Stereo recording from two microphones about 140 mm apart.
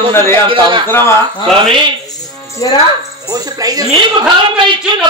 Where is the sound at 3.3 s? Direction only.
25° right (ahead or behind).